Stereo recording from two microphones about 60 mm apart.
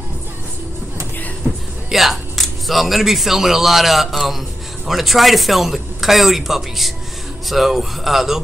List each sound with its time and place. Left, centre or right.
1.5 s music: right
1.9 s speech: centre